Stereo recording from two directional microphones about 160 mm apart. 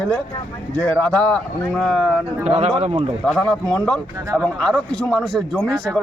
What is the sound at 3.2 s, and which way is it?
Speech, 5° left (ahead or behind).